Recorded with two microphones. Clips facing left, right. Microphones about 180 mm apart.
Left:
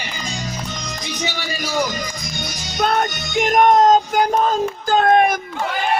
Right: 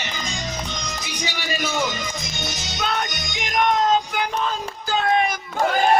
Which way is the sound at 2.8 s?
45° left (ahead or behind).